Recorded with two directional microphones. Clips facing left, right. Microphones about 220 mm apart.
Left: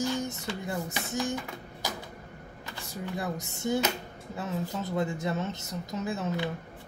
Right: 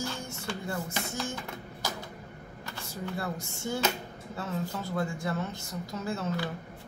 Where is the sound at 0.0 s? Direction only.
20° left (ahead or behind).